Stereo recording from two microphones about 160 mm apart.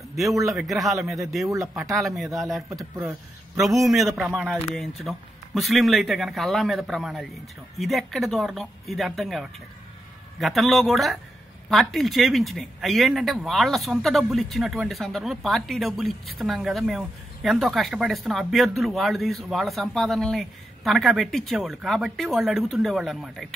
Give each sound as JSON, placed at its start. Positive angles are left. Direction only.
{"t": 0.1, "sound": "speech", "side_deg": 0}
{"t": 1.5, "sound": "speech", "side_deg": -20}
{"t": 1.8, "sound": "speech", "side_deg": 0}